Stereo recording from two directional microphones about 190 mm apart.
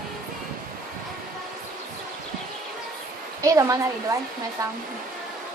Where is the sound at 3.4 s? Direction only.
15° right (ahead or behind).